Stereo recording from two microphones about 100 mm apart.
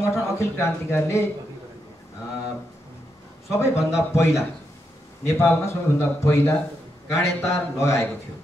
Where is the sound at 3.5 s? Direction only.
30° left (ahead or behind).